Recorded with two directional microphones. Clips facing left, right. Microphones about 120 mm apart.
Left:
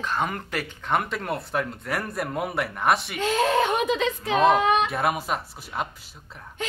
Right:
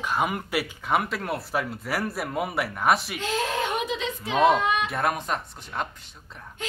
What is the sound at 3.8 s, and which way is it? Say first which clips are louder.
Speech: left 5 dB; 55° left (ahead or behind).